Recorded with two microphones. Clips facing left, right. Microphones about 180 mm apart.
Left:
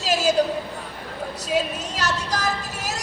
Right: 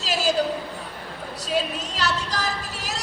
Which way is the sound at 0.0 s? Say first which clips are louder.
Left 4 dB; 45° left (ahead or behind).